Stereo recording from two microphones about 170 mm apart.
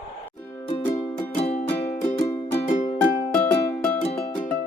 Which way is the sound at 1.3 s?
35° left (ahead or behind).